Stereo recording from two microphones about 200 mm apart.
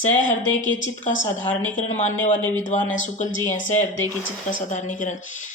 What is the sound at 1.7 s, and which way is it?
Speech, 35° left (ahead or behind).